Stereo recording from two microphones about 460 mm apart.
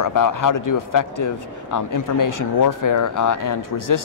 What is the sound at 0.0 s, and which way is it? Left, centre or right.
A man's voice, left.